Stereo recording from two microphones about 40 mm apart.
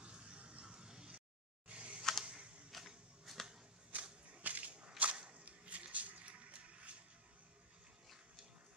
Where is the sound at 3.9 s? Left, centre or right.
Right.